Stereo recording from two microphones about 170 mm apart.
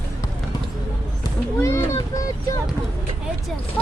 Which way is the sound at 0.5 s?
25° left (ahead or behind).